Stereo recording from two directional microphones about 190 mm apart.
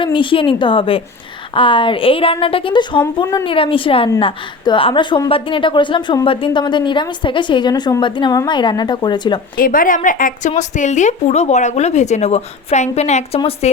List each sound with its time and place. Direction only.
0.0 s a woman's voice: 25° left (ahead or behind)
9.6 s a woman's voice: 45° left (ahead or behind)